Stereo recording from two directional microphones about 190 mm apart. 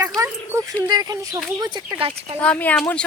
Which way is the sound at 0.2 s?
20° right (ahead or behind).